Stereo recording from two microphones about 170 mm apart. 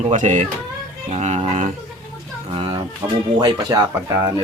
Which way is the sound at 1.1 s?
40° right (ahead or behind).